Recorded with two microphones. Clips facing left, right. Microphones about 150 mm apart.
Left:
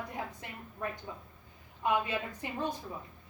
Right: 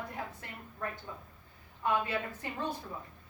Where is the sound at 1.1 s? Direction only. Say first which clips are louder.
Left 1 dB; 15° left (ahead or behind).